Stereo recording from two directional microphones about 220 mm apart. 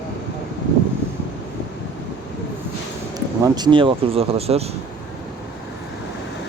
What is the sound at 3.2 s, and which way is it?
Speech, 15° right (ahead or behind).